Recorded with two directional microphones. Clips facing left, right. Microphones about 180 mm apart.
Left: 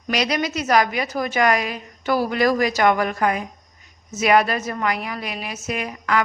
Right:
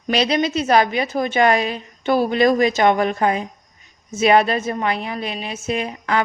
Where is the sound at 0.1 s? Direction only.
25° right (ahead or behind).